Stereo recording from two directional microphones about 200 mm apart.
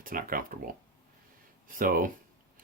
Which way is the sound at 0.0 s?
45° right (ahead or behind).